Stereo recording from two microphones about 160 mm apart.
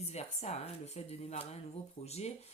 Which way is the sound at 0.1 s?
40° left (ahead or behind).